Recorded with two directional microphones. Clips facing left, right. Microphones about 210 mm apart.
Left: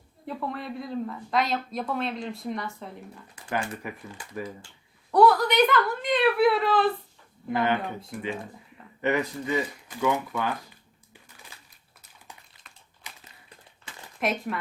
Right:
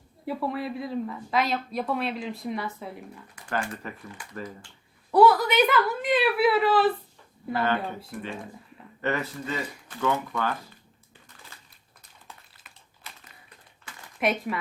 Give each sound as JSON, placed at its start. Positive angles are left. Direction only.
{"t": 0.3, "sound": "speech", "side_deg": -5}
{"t": 3.3, "sound": "speech", "side_deg": 15}
{"t": 5.1, "sound": "a woman's voice", "side_deg": 0}
{"t": 7.5, "sound": "speech", "side_deg": 15}
{"t": 12.7, "sound": "crumpling", "side_deg": -5}
{"t": 13.0, "sound": "a sound", "side_deg": 15}
{"t": 14.2, "sound": "speech", "side_deg": 0}